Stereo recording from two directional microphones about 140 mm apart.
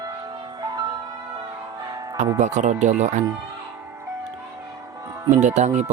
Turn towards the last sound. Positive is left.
turn(degrees=-55)  # may be behind; listen again after turning